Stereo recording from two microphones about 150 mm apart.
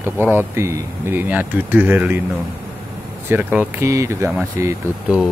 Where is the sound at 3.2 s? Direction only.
15° right (ahead or behind).